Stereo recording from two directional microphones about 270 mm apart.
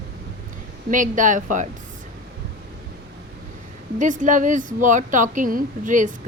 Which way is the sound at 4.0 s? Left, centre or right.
Right.